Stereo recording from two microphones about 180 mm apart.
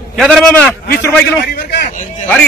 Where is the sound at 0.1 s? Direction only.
Centre (ahead or behind).